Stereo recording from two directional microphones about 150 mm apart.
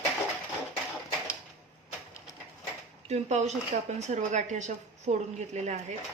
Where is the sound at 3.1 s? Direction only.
50° right (ahead or behind).